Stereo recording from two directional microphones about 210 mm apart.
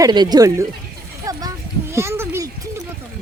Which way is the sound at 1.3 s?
15° right (ahead or behind).